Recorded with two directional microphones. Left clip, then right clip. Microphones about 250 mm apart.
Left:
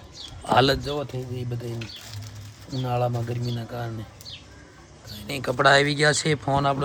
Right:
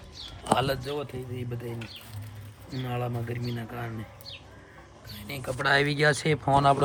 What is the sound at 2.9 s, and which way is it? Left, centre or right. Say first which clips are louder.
Speech: left 8 dB; centre.